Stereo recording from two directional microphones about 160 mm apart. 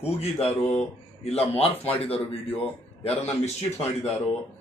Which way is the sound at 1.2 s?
35° left (ahead or behind).